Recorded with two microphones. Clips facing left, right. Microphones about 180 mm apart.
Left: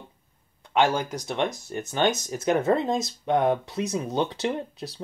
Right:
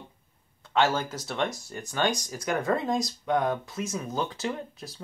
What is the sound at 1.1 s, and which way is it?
Speech, 20° left (ahead or behind).